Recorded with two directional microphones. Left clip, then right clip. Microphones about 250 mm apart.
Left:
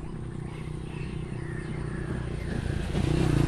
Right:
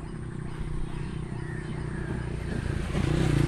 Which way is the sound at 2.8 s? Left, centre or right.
Centre.